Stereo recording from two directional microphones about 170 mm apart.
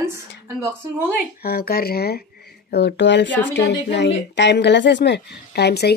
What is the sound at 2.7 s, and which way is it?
Speech, 75° left (ahead or behind).